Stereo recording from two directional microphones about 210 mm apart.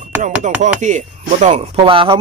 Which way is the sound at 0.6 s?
35° right (ahead or behind).